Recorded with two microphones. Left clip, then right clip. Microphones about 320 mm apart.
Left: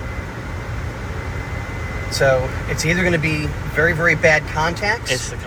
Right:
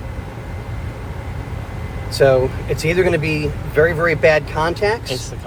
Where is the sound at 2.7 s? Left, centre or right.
Right.